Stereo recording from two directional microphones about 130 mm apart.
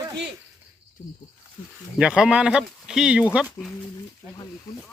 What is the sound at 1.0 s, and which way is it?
Speech, 65° left (ahead or behind).